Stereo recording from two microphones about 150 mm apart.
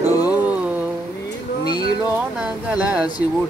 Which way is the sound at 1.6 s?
30° left (ahead or behind).